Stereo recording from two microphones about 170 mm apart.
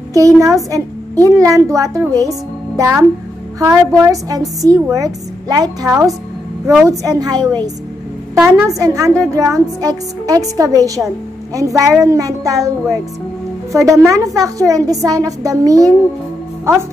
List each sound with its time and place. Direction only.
0.1 s a woman's voice: 20° right (ahead or behind)